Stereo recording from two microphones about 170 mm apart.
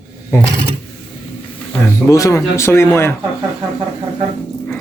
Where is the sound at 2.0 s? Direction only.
20° left (ahead or behind).